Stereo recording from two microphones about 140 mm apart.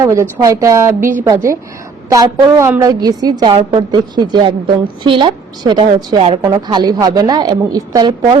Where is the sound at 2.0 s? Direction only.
25° right (ahead or behind).